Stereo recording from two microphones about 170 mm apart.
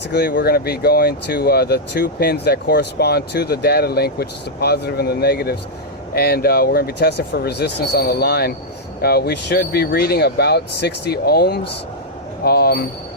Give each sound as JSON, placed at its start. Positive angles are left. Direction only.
{"t": 0.1, "sound": "speech", "side_deg": 80}